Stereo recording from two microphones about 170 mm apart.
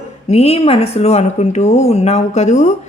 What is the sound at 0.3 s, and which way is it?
Speech, 35° left (ahead or behind).